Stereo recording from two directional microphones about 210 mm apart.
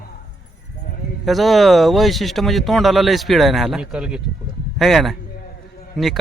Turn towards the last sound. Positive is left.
turn(degrees=0)  # may be behind; listen again after turning